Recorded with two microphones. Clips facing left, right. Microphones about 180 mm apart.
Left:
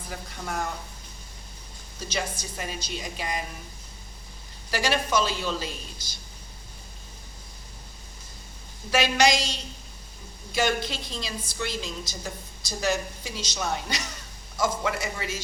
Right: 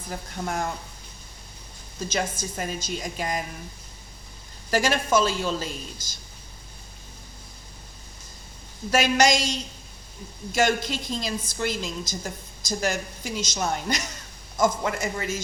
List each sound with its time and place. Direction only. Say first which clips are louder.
0.1 s a woman's voice: right 4 dB; 50° right (ahead or behind)
2.4 s a woman's voice: right 4 dB; 45° right (ahead or behind)
4.7 s a woman's voice: right 3 dB; 45° right (ahead or behind)
8.9 s a woman's voice: right 2 dB; 45° right (ahead or behind)